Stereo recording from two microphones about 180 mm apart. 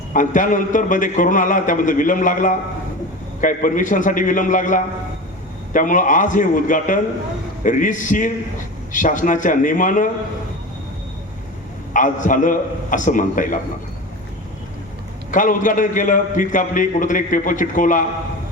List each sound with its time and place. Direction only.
0.1 s a man's voice: 45° left (ahead or behind)
11.9 s a man's voice: 45° left (ahead or behind)
15.3 s a man's voice: 45° left (ahead or behind)